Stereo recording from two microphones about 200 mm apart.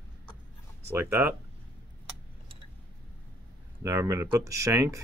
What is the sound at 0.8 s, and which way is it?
Speech, 10° right (ahead or behind).